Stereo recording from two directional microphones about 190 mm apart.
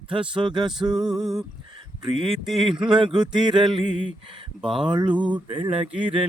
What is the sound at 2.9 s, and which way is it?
Mantra, 25° right (ahead or behind).